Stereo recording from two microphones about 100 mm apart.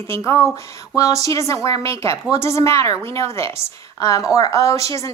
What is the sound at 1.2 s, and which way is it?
A woman's voice, 30° left (ahead or behind).